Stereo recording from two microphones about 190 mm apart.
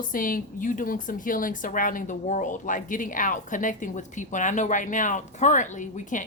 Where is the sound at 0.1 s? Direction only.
45° left (ahead or behind).